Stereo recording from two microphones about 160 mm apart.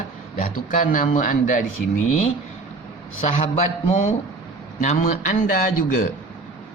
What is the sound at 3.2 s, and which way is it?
A man's voice, 45° left (ahead or behind).